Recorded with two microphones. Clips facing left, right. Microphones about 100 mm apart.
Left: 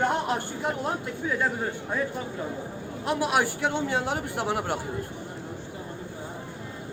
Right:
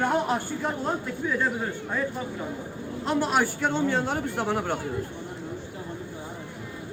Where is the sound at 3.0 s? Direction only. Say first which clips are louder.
Right 1 dB; 10° left (ahead or behind).